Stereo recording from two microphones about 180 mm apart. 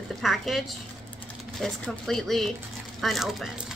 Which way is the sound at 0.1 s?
Centre (ahead or behind).